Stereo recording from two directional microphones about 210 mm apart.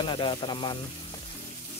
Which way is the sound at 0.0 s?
25° left (ahead or behind).